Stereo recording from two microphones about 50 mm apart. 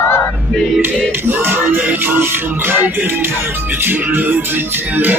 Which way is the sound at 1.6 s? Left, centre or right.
Right.